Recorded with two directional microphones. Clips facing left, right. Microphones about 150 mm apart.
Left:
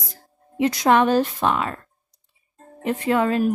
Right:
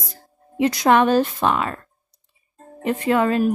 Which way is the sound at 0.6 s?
70° right (ahead or behind).